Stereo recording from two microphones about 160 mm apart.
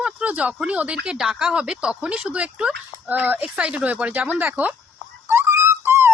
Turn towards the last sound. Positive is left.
turn(degrees=-15)  # may be behind; listen again after turning